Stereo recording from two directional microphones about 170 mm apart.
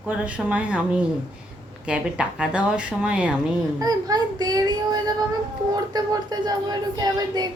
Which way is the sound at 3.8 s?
20° right (ahead or behind).